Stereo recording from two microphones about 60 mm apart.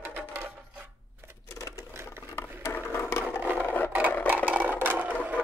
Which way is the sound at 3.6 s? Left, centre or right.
Left.